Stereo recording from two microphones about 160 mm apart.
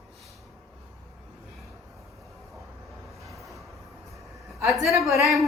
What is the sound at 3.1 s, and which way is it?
Vehicle, centre (ahead or behind).